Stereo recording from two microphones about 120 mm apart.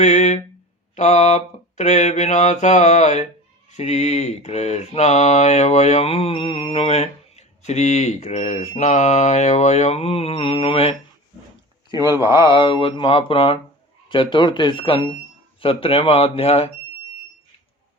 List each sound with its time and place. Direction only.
0.0 s a sound: 75° left (ahead or behind)
0.9 s mantra: 70° left (ahead or behind)
3.7 s mantra: 65° left (ahead or behind); by 10.9 s 50° left (ahead or behind)
11.9 s a man's voice: 30° left (ahead or behind)
12.4 s mantra: 45° left (ahead or behind)